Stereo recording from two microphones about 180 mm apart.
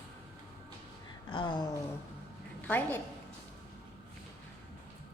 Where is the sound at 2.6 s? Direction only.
10° left (ahead or behind).